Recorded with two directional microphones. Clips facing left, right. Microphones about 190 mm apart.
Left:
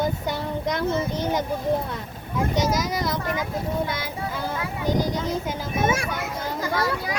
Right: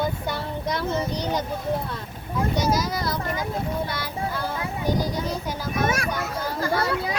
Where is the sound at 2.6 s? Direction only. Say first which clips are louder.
Left 1 dB; 20° left (ahead or behind).